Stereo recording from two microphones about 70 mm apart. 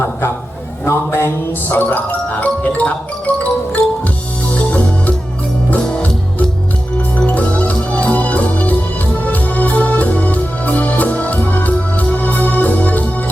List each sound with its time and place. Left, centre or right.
0.9 s a sound: left
1.7 s music: left
7.2 s music: centre